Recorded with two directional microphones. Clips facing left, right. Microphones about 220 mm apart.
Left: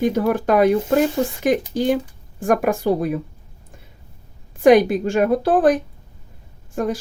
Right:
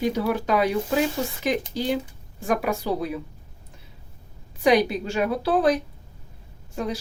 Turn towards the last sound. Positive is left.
turn(degrees=50)  # may be behind; listen again after turning